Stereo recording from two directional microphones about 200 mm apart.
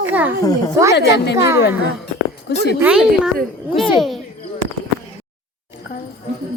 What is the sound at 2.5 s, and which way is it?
Speech, 55° left (ahead or behind).